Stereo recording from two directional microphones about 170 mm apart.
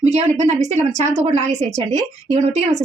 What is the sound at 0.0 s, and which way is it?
A woman's voice, 40° right (ahead or behind).